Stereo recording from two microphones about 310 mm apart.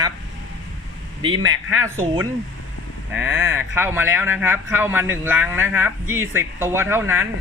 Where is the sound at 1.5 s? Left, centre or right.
Centre.